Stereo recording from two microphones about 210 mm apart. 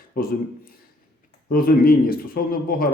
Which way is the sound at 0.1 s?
45° left (ahead or behind).